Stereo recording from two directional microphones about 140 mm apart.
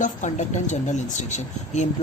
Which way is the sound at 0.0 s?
60° left (ahead or behind).